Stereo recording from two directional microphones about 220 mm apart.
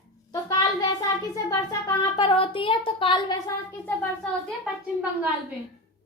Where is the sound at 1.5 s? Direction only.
20° left (ahead or behind).